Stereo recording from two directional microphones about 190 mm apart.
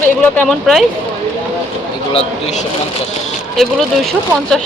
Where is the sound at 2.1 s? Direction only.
30° left (ahead or behind).